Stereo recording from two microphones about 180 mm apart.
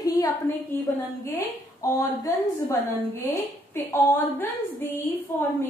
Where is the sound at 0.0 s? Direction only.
20° left (ahead or behind).